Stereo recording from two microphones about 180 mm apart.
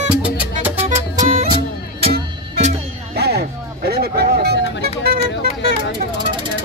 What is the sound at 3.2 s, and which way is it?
Music, 65° right (ahead or behind).